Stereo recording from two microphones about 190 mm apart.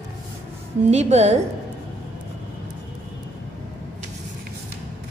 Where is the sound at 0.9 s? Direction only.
35° right (ahead or behind).